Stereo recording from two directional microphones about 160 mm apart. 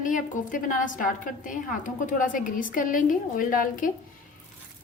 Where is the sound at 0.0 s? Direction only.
55° left (ahead or behind).